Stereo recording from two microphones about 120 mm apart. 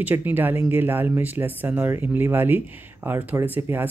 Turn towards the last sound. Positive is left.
turn(degrees=-15)  # may be behind; listen again after turning